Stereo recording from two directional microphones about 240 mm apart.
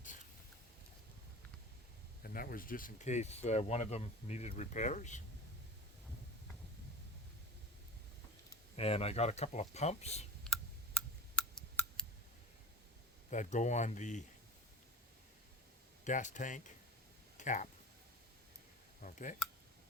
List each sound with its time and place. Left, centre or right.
2.2 s speech: left
8.7 s speech: left
10.4 s a sound: centre
13.3 s speech: left
16.0 s speech: left
17.3 s a sound: left
19.0 s speech: left